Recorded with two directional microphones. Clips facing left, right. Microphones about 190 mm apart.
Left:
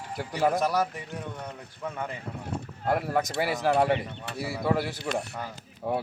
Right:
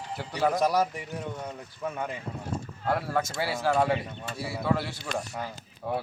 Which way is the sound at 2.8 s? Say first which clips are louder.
Left 2 dB; 15° left (ahead or behind).